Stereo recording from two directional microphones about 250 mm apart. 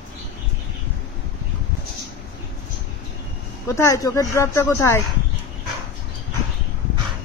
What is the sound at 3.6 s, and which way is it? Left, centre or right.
A woman's voice, centre.